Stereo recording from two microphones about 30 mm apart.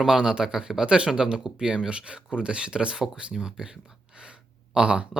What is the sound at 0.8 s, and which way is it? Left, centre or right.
Speech, right.